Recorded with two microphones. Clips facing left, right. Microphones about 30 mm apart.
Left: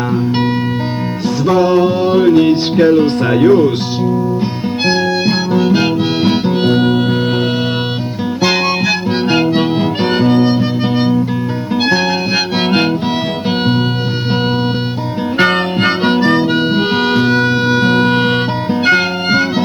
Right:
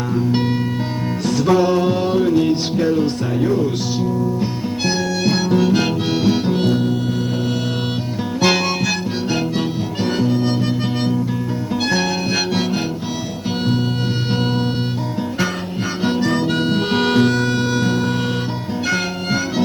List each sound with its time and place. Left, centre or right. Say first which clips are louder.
0.1 s music: left 2 dB; left
2.1 s music: left 8 dB; left
3.3 s speech: left 10 dB; left
4.9 s music: left 5 dB; left
5.5 s harmonica: left 4 dB; centre
6.2 s music: left 2 dB; left
6.7 s music: left 6 dB; left
9.3 s harmonica: left 9 dB; left
10.4 s music: left 6 dB; left
15.4 s harmonica: left 14 dB; left
17.0 s music: even; centre
17.3 s music: left 6 dB; left